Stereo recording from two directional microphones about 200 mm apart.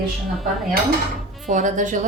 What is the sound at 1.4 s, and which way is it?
Speech, 40° right (ahead or behind).